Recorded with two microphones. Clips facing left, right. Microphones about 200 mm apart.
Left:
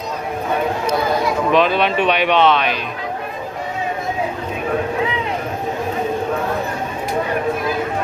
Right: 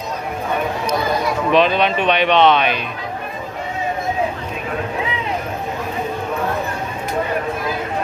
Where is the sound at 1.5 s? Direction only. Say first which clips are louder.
Right 1 dB; 5° left (ahead or behind).